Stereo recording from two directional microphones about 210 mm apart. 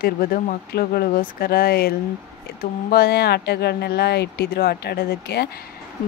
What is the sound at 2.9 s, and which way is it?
Speech, 50° left (ahead or behind).